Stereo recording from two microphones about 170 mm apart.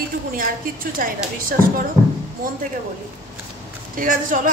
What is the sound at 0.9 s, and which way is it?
Speech, 55° right (ahead or behind).